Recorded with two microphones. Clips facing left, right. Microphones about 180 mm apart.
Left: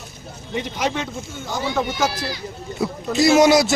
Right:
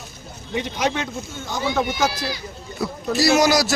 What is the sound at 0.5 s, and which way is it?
Speech, centre (ahead or behind).